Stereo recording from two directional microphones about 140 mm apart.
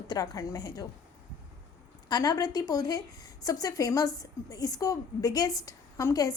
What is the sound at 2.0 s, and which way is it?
A woman's voice, 30° left (ahead or behind).